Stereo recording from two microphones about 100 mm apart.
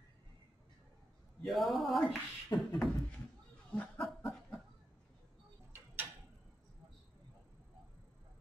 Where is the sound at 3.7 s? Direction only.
10° left (ahead or behind).